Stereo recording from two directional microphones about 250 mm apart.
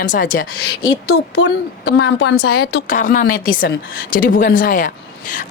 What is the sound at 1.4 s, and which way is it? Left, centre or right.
A woman's voice, left.